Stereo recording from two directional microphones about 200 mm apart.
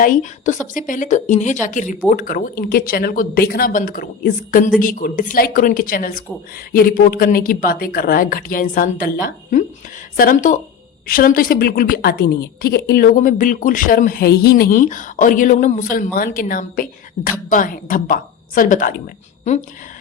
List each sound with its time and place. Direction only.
0.0 s a woman's voice: 40° left (ahead or behind)